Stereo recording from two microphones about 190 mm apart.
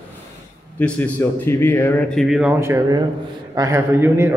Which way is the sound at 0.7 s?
10° left (ahead or behind).